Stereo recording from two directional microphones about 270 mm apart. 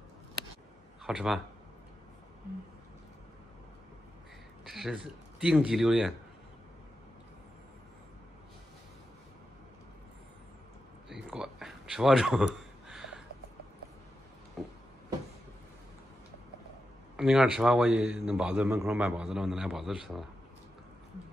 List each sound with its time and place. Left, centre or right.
1.0 s speech: centre
4.6 s speech: centre
11.2 s a sound: centre
14.6 s music: centre
17.2 s a man's voice: centre